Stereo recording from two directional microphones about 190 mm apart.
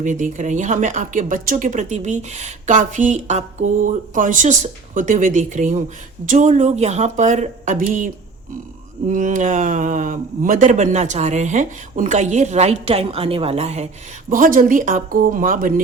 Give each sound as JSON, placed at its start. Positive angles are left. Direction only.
{"t": 0.0, "sound": "speech", "side_deg": -40}
{"t": 14.3, "sound": "speech", "side_deg": -45}